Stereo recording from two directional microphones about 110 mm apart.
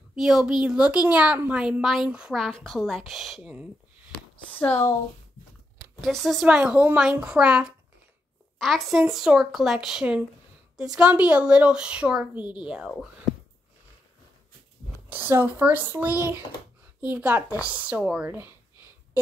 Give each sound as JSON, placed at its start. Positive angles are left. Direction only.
{"t": 0.1, "sound": "a woman's voice", "side_deg": -5}
{"t": 2.4, "sound": "a woman's voice", "side_deg": 0}
{"t": 4.1, "sound": "a sound", "side_deg": 15}
{"t": 5.9, "sound": "a woman's voice", "side_deg": 0}
{"t": 6.4, "sound": "a woman's voice", "side_deg": -10}
{"t": 8.5, "sound": "a woman's voice", "side_deg": 5}
{"t": 15.0, "sound": "a woman's voice", "side_deg": -20}